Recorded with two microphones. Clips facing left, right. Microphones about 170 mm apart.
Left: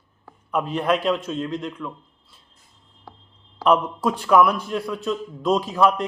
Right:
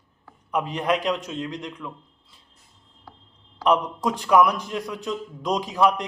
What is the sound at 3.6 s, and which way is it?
A man's voice, 15° right (ahead or behind).